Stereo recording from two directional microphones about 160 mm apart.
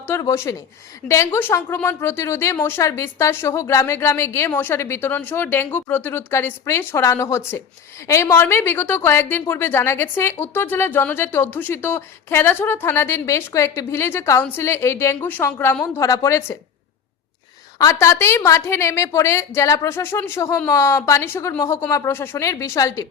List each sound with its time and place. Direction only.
0.0 s a woman's voice: 20° left (ahead or behind)
18.0 s a woman's voice: 15° left (ahead or behind)